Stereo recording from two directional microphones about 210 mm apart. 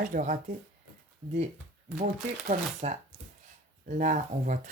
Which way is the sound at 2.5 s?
35° right (ahead or behind).